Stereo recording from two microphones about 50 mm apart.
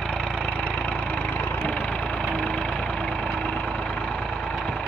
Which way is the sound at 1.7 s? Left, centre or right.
Left.